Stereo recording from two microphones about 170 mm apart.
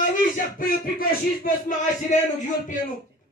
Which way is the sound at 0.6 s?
55° left (ahead or behind).